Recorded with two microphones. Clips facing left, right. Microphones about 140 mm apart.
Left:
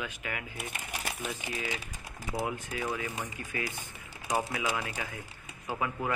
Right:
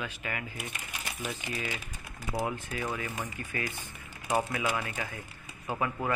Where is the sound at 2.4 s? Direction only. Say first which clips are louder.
Even; 15° left (ahead or behind).